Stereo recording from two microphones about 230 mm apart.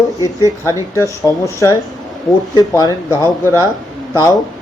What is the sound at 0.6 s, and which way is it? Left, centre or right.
Speech, centre.